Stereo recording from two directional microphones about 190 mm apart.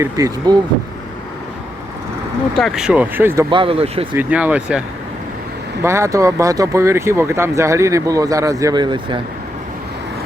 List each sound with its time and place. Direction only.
0.0 s speech: 15° right (ahead or behind)
2.6 s speech: centre (ahead or behind)
3.5 s speech: 30° right (ahead or behind)
4.1 s speech: 10° right (ahead or behind)
5.8 s speech: 15° right (ahead or behind)